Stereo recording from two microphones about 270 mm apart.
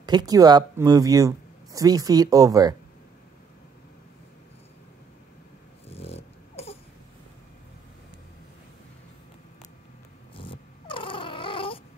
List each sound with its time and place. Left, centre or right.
0.0 s speech: centre
5.9 s dog: left
10.3 s cat: centre